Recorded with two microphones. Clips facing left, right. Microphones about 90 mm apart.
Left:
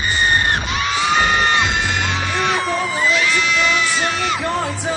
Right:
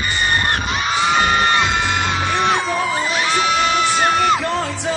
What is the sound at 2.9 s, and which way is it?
Music, 50° right (ahead or behind).